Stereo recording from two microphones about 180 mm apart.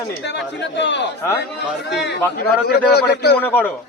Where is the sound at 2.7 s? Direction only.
60° left (ahead or behind).